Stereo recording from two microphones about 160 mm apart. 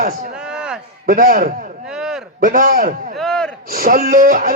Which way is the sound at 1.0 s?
65° right (ahead or behind).